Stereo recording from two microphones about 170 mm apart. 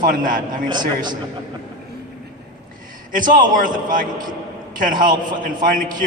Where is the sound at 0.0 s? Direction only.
55° right (ahead or behind).